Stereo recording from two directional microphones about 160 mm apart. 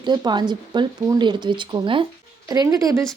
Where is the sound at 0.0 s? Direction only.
25° right (ahead or behind).